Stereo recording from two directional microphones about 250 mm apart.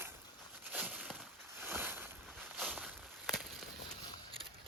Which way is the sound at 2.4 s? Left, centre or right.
Centre.